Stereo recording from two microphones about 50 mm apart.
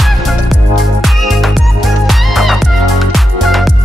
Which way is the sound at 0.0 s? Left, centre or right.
Centre.